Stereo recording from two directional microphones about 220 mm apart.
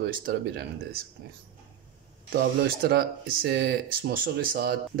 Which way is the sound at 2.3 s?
45° right (ahead or behind).